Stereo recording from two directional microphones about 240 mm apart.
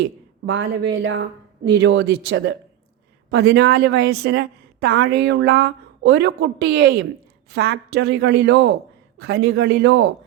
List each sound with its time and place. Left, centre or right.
0.4 s a woman's voice: right